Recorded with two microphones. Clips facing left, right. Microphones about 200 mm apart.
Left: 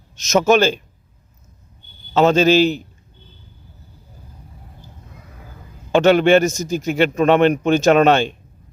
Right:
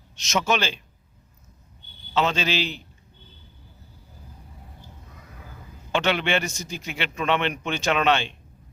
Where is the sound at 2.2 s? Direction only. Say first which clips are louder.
Left 11 dB; 45° left (ahead or behind).